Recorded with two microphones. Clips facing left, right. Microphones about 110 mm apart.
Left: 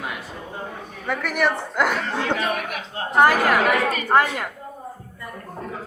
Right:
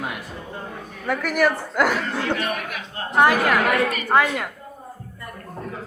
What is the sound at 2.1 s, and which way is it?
Speech, 25° left (ahead or behind).